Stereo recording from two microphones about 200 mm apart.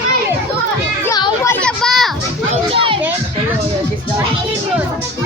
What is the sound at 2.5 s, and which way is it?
Children playing, 25° right (ahead or behind).